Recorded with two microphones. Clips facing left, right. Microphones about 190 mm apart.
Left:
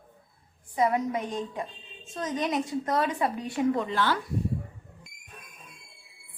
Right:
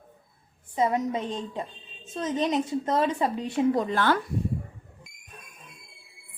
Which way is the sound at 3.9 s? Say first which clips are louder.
Right 3 dB; 55° right (ahead or behind).